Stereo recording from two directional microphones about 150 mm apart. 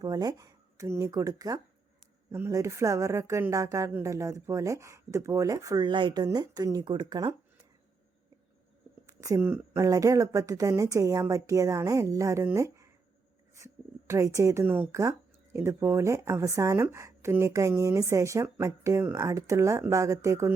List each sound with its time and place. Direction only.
0.0 s speech: 25° right (ahead or behind)
9.0 s speech: 20° right (ahead or behind)
14.1 s speech: 20° right (ahead or behind)